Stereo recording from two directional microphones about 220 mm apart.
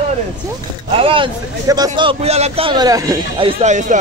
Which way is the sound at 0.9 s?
25° right (ahead or behind).